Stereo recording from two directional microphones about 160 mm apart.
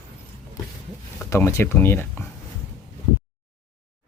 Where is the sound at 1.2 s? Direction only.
15° left (ahead or behind).